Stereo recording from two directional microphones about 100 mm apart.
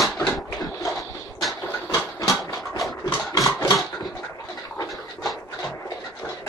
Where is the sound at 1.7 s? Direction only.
35° left (ahead or behind).